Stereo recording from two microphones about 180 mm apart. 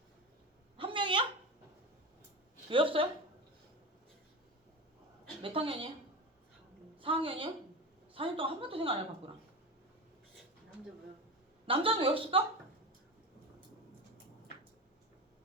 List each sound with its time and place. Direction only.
0.8 s a sound: 30° right (ahead or behind)
2.6 s a woman's voice: 30° right (ahead or behind)
5.4 s a woman's voice: 30° right (ahead or behind)
7.0 s a woman's voice: 30° right (ahead or behind)
11.6 s a woman's voice: 30° right (ahead or behind)